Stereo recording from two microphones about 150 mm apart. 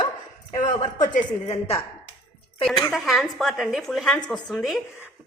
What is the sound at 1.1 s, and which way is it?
Speech, 45° left (ahead or behind).